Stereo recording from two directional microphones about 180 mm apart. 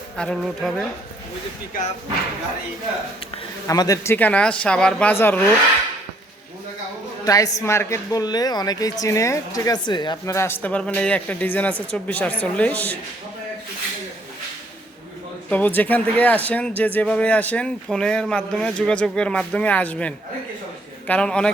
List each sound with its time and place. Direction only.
0.2 s speech: 5° left (ahead or behind)
3.7 s speech: 20° left (ahead or behind)
7.3 s a woman's voice: 20° left (ahead or behind)
15.4 s speech: 10° left (ahead or behind)